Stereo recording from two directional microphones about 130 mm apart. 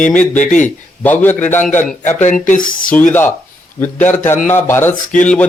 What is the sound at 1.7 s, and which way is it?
Speech, 70° left (ahead or behind).